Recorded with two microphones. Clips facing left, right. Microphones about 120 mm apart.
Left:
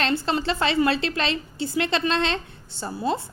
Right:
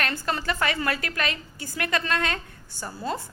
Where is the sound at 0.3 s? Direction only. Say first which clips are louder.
Left 3 dB; 25° left (ahead or behind).